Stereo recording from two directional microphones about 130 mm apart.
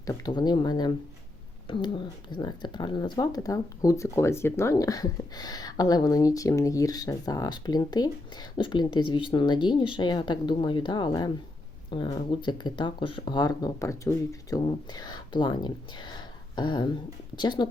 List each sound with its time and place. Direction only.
0.0 s speech: 30° left (ahead or behind)